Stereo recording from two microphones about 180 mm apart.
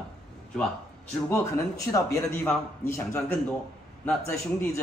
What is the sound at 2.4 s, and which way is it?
Speech, 5° left (ahead or behind).